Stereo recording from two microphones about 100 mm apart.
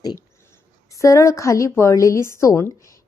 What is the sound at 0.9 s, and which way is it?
A woman's voice, 30° left (ahead or behind).